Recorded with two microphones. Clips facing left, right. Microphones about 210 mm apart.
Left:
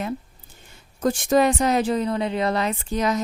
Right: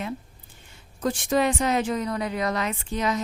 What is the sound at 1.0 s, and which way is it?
A woman's voice, 45° left (ahead or behind).